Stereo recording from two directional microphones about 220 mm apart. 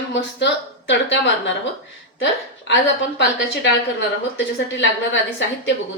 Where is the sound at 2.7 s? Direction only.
50° left (ahead or behind).